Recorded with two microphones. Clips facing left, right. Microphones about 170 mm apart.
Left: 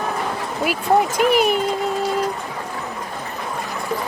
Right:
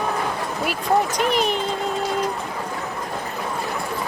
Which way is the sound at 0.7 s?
5° left (ahead or behind).